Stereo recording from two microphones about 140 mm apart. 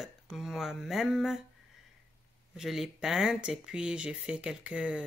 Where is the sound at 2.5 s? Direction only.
Centre (ahead or behind).